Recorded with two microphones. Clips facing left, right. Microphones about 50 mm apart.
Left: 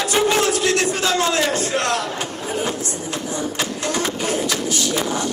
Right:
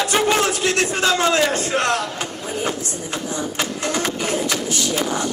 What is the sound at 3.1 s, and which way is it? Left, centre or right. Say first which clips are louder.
Music: right 1 dB; right.